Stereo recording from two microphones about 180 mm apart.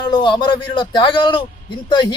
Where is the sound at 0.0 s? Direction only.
25° left (ahead or behind).